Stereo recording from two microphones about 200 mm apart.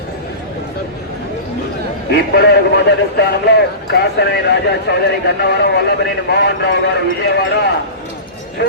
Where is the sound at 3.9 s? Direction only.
55° left (ahead or behind).